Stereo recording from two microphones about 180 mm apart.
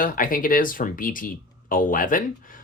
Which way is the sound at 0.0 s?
50° left (ahead or behind).